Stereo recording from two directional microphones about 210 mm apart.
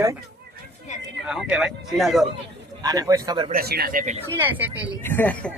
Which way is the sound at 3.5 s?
45° right (ahead or behind).